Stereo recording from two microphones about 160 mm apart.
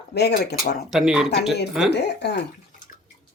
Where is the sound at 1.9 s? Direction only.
90° left.